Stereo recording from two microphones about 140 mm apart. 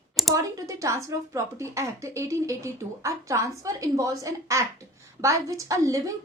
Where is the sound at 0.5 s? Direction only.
25° right (ahead or behind).